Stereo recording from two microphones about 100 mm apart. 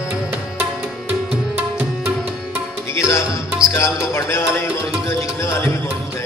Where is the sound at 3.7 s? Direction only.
30° left (ahead or behind).